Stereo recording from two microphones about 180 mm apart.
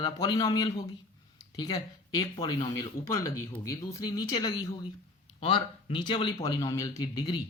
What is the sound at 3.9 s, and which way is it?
Speech, 20° left (ahead or behind).